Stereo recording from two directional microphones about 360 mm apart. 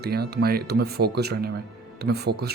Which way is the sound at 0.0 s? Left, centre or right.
Right.